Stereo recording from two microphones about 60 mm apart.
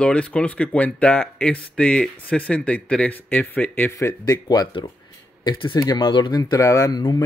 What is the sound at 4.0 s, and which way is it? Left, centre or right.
Speech, left.